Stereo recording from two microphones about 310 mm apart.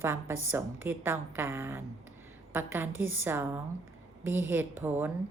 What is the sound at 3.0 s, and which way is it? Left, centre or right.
Speech, right.